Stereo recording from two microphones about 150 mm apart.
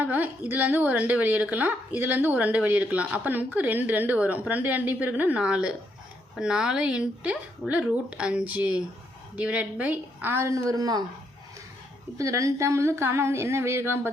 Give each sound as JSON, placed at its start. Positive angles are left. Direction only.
{"t": 0.0, "sound": "a woman's voice", "side_deg": -10}
{"t": 12.1, "sound": "speech", "side_deg": -20}